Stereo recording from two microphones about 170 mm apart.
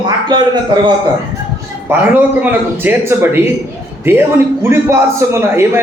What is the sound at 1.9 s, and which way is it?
A man's voice, 15° right (ahead or behind).